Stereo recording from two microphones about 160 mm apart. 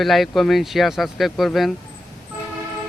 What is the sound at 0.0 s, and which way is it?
Speech, centre (ahead or behind).